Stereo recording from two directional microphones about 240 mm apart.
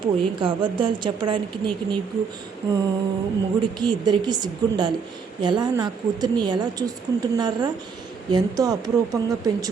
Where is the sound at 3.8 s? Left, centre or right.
Centre.